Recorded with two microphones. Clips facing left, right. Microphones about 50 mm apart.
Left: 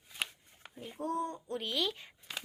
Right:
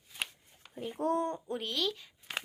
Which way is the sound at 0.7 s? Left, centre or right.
Right.